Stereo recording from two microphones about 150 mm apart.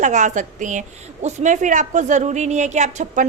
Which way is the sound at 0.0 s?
55° right (ahead or behind).